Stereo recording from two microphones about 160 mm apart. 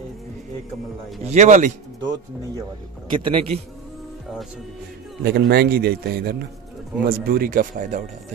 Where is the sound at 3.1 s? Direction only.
35° right (ahead or behind).